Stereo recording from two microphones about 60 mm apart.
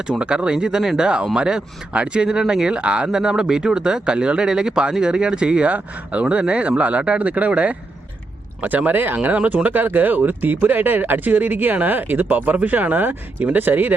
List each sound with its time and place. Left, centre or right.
0.0 s speech: centre